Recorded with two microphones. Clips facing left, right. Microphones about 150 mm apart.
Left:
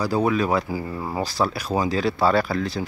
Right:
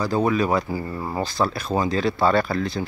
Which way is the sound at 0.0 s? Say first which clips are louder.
Even; 5° left (ahead or behind).